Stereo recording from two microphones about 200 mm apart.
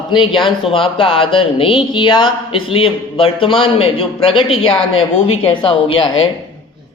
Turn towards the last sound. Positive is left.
turn(degrees=25)  # may be behind; listen again after turning